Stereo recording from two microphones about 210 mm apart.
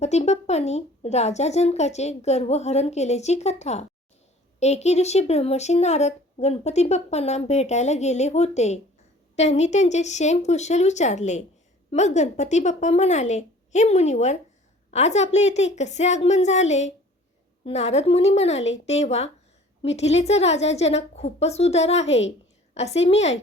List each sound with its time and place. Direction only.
0.0 s speech: 30° left (ahead or behind)